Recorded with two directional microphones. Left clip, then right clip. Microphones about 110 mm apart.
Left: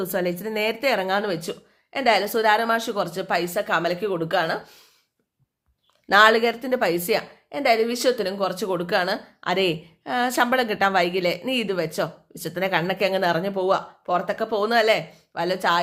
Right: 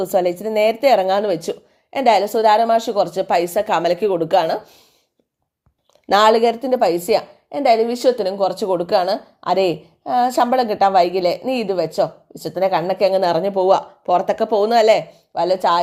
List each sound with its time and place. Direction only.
0.0 s a woman's voice: 30° right (ahead or behind)
2.2 s a woman's voice: 20° right (ahead or behind)
4.6 s speech: 15° right (ahead or behind)
6.2 s a woman's voice: 25° right (ahead or behind)
13.6 s a woman's voice: 40° right (ahead or behind); by 15.8 s 25° right (ahead or behind)